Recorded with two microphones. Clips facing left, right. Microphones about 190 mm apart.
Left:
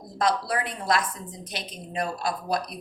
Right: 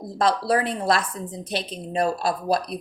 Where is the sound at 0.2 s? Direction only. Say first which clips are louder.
Right 4 dB; 30° right (ahead or behind).